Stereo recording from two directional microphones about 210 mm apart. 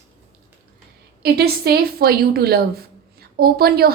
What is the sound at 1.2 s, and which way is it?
A woman's voice, 50° right (ahead or behind).